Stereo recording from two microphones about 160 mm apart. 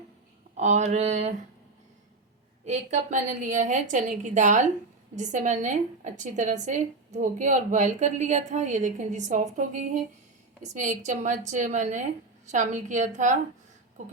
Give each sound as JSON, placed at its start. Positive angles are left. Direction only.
{"t": 0.5, "sound": "a woman's voice", "side_deg": -45}
{"t": 2.6, "sound": "a woman's voice", "side_deg": -50}